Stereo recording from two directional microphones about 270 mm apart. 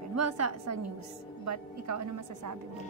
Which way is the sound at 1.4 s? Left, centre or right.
Right.